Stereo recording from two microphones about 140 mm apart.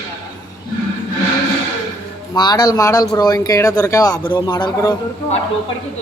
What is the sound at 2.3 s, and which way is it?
A man's voice, 30° left (ahead or behind).